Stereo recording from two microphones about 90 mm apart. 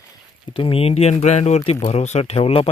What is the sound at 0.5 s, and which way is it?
Speech, 85° left.